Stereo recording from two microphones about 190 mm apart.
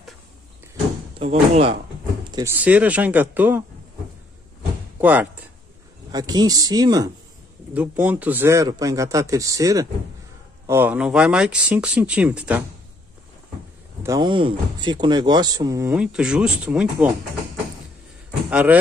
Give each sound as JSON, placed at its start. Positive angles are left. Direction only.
{"t": 1.2, "sound": "speech", "side_deg": -35}
{"t": 2.3, "sound": "a man's voice", "side_deg": -10}
{"t": 4.9, "sound": "speech", "side_deg": -10}
{"t": 6.1, "sound": "speech", "side_deg": -20}
{"t": 7.7, "sound": "a man's voice", "side_deg": -10}
{"t": 14.0, "sound": "speech", "side_deg": -20}
{"t": 16.0, "sound": "speech", "side_deg": -5}
{"t": 18.5, "sound": "a man's voice", "side_deg": -5}